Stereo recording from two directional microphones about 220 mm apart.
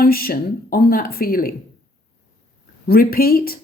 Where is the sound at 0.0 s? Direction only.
40° left (ahead or behind).